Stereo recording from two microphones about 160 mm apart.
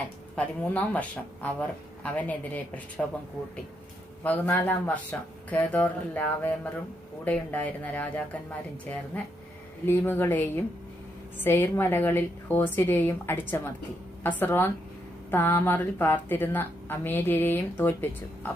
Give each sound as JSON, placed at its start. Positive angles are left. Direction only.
{"t": 0.3, "sound": "a woman's voice", "side_deg": 10}
{"t": 4.2, "sound": "a woman's voice", "side_deg": 10}